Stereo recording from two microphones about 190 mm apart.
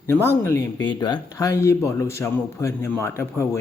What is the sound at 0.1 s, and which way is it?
Speech, 10° left (ahead or behind).